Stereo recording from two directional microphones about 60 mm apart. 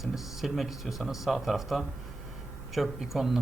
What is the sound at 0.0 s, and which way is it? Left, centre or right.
Speech, centre.